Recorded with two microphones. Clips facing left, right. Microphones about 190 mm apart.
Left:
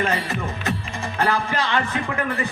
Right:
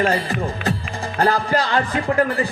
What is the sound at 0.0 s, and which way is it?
A man's voice, 35° right (ahead or behind).